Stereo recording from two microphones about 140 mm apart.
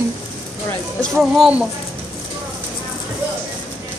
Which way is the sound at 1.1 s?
5° right (ahead or behind).